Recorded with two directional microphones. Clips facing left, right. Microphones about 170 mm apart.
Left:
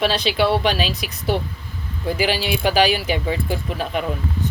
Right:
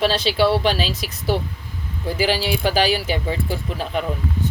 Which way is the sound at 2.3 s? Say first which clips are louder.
Even; 40° right (ahead or behind).